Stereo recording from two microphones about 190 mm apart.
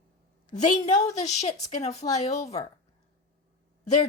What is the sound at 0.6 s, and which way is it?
A woman's voice, 40° left (ahead or behind).